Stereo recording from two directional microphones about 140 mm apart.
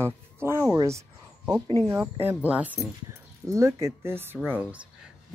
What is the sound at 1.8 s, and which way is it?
Speech, 15° right (ahead or behind).